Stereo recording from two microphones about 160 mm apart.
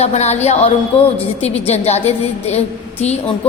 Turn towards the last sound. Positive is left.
turn(degrees=40)  # may be behind; listen again after turning